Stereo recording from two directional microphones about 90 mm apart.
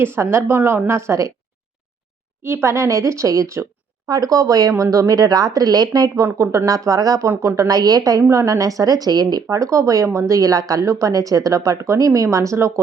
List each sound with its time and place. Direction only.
0.0 s a woman's voice: 30° right (ahead or behind)
2.4 s speech: 30° right (ahead or behind); by 9.6 s 45° right (ahead or behind)
9.6 s speech: 35° right (ahead or behind)